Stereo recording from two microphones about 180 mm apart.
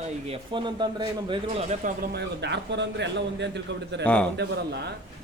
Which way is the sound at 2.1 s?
75° right (ahead or behind).